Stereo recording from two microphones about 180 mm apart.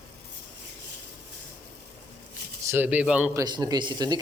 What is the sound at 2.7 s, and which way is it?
Speech, 10° right (ahead or behind).